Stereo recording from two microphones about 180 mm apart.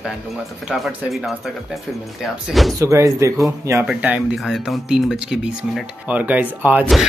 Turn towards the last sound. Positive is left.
turn(degrees=-10)  # may be behind; listen again after turning